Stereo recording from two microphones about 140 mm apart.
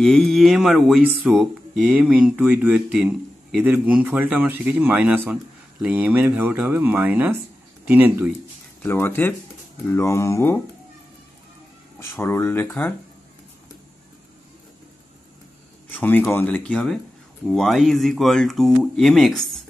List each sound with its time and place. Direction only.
0.0 s a man's voice: centre (ahead or behind); by 8.3 s 15° right (ahead or behind)
8.8 s speech: 15° left (ahead or behind)
12.2 s speech: 15° left (ahead or behind)
15.9 s speech: 10° left (ahead or behind)